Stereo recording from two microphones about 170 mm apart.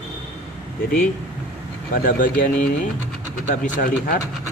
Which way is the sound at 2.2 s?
50° left (ahead or behind).